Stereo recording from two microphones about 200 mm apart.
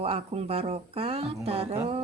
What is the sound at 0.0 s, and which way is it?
A woman's voice, 30° right (ahead or behind).